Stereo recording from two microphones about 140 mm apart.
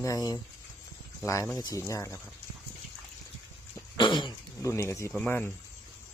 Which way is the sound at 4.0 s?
30° left (ahead or behind).